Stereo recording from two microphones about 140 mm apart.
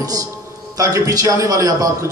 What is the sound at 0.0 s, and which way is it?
A man's voice, 25° right (ahead or behind).